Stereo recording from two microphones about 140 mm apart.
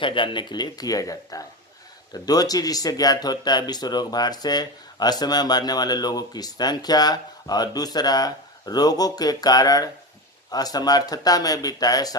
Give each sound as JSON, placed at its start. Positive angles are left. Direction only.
{"t": 0.0, "sound": "speech", "side_deg": 35}